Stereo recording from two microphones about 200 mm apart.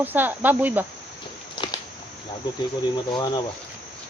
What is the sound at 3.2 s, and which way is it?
Speech, 20° left (ahead or behind).